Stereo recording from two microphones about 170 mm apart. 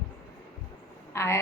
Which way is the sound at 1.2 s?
15° left (ahead or behind).